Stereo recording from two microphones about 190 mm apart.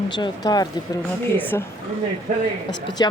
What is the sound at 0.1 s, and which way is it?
Speech, 20° left (ahead or behind).